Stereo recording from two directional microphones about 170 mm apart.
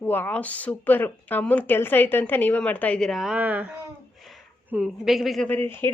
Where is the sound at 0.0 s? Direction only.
10° left (ahead or behind).